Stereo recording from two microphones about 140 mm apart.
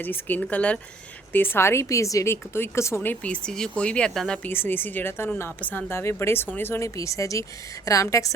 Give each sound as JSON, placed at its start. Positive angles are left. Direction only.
{"t": 0.0, "sound": "a woman's voice", "side_deg": 15}
{"t": 4.4, "sound": "a woman's voice", "side_deg": 15}